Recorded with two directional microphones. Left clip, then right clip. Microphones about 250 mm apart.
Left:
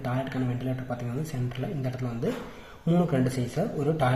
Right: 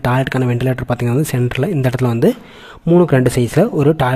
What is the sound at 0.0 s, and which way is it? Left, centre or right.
Speech, right.